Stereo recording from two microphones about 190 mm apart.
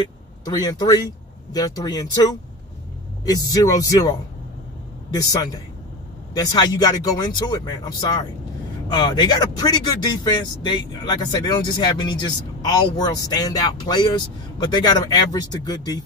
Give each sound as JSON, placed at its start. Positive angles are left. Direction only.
{"t": 0.5, "sound": "speech", "side_deg": 20}
{"t": 5.1, "sound": "speech", "side_deg": 20}